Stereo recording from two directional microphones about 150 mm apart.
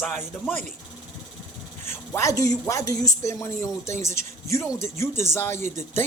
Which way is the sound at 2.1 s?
20° left (ahead or behind).